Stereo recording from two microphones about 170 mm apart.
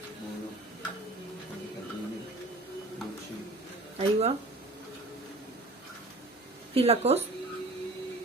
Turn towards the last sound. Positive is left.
turn(degrees=-35)  # may be behind; listen again after turning